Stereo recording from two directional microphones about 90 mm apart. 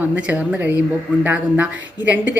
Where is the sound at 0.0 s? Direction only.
15° right (ahead or behind).